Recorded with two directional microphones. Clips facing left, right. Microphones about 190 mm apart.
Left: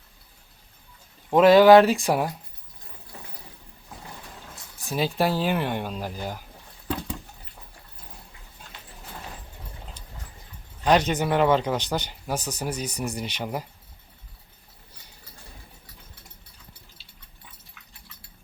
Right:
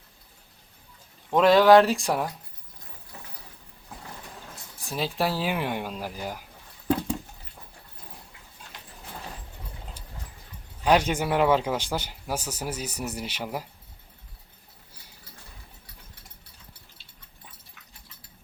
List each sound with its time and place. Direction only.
1.3 s speech: 5° left (ahead or behind)
4.8 s speech: centre (ahead or behind)
10.8 s speech: 10° right (ahead or behind)